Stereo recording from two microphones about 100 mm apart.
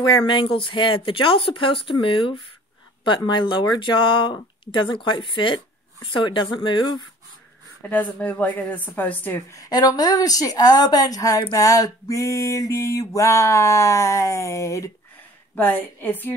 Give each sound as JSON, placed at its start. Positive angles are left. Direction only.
{"t": 0.3, "sound": "speech", "side_deg": 60}
{"t": 7.9, "sound": "a woman's voice", "side_deg": 15}
{"t": 9.5, "sound": "mantra", "side_deg": 40}
{"t": 15.5, "sound": "a woman's voice", "side_deg": 20}